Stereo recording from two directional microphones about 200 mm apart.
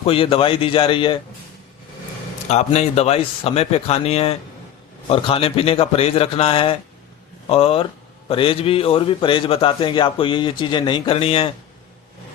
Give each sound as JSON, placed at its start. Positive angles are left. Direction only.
{"t": 0.0, "sound": "a man's voice", "side_deg": 30}
{"t": 2.5, "sound": "a man's voice", "side_deg": 35}